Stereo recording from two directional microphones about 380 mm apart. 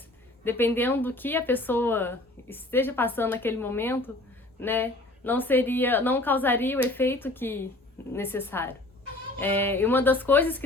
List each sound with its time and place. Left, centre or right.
0.4 s a woman's voice: centre